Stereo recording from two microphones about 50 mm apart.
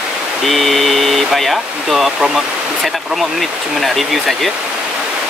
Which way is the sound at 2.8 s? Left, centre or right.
Centre.